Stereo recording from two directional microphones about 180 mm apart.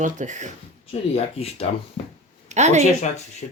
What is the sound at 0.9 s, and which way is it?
Speech, 35° left (ahead or behind).